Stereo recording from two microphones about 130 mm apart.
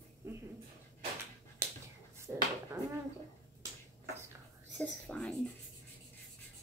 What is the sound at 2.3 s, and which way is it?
Speech, 15° right (ahead or behind).